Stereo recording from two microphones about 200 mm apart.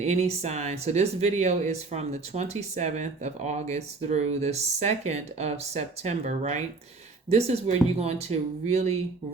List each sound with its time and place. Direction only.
0.0 s speech: 35° right (ahead or behind)